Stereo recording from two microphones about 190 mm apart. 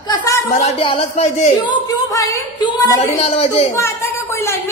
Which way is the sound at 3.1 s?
30° left (ahead or behind).